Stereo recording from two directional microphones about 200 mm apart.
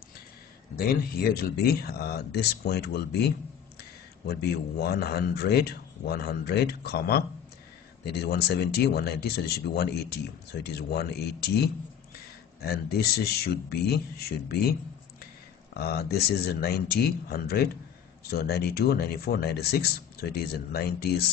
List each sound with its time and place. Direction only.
0.7 s speech: 50° left (ahead or behind)